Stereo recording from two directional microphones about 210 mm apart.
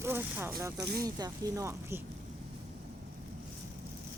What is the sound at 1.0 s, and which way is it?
Speech, 15° right (ahead or behind).